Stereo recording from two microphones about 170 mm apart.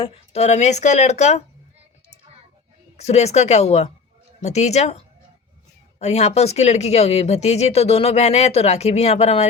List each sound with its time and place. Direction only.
0.0 s speech: 35° left (ahead or behind)
3.0 s speech: 40° left (ahead or behind)